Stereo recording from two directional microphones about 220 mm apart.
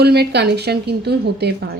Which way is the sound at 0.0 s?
50° right (ahead or behind).